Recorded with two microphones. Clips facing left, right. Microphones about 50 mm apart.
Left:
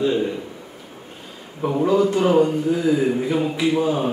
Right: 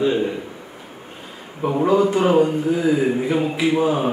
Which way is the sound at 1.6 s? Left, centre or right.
Centre.